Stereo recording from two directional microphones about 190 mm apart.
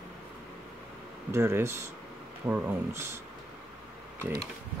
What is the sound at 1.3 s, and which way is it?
Speech, 15° right (ahead or behind).